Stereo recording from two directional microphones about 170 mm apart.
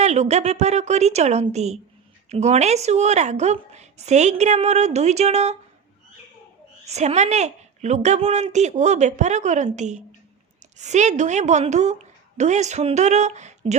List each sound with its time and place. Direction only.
0.0 s a woman's voice: 40° right (ahead or behind)
6.8 s a woman's voice: 40° right (ahead or behind)